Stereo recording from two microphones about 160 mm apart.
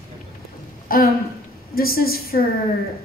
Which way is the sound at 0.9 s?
65° left (ahead or behind).